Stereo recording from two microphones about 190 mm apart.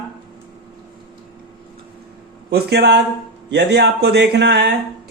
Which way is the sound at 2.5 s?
60° right (ahead or behind).